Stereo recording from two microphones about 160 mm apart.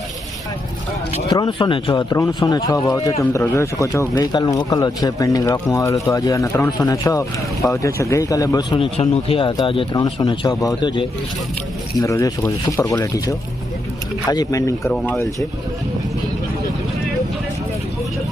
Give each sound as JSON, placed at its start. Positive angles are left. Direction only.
{"t": 1.3, "sound": "speech", "side_deg": 25}
{"t": 8.7, "sound": "speech", "side_deg": 35}